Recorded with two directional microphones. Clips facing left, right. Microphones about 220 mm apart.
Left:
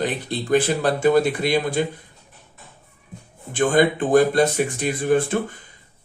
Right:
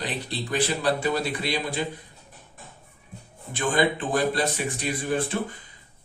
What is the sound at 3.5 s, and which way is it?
Speech, 50° left (ahead or behind).